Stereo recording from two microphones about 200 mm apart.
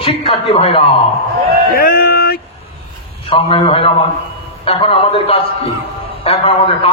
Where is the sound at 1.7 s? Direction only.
50° left (ahead or behind).